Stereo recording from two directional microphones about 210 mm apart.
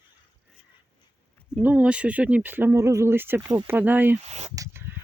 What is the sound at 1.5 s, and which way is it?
Speech, 5° right (ahead or behind).